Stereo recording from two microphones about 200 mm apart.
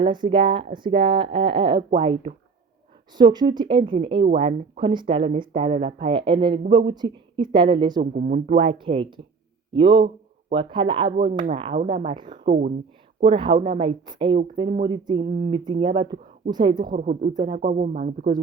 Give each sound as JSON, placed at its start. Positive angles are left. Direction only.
{"t": 0.0, "sound": "speech", "side_deg": -25}
{"t": 8.1, "sound": "speech", "side_deg": -40}
{"t": 12.5, "sound": "speech", "side_deg": -45}
{"t": 13.2, "sound": "speech", "side_deg": -25}
{"t": 16.8, "sound": "speech", "side_deg": -40}
{"t": 17.3, "sound": "speech", "side_deg": -25}
{"t": 17.6, "sound": "speech", "side_deg": -40}